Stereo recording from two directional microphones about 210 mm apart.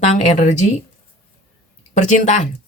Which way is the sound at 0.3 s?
30° left (ahead or behind).